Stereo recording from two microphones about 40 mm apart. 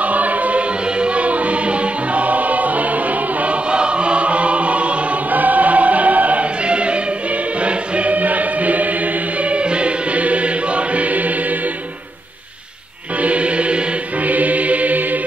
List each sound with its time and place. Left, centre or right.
0.0 s choir: right
13.2 s chant: right
14.3 s chant: right